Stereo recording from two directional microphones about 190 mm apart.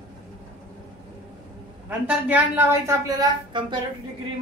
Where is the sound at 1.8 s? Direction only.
10° right (ahead or behind).